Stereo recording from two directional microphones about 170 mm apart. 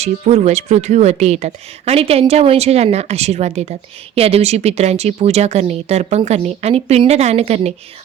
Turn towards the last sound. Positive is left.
turn(degrees=-40)  # may be behind; listen again after turning